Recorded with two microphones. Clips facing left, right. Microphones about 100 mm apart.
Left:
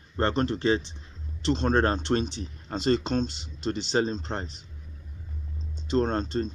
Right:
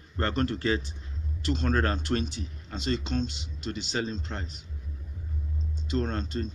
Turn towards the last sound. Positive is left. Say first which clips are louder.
# left 5 dB
turn(degrees=35)  # may be behind; listen again after turning